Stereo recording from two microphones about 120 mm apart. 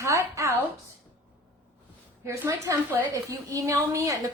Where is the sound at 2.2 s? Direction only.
25° right (ahead or behind).